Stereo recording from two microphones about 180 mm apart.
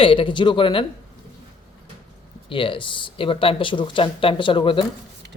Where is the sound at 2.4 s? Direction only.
30° left (ahead or behind).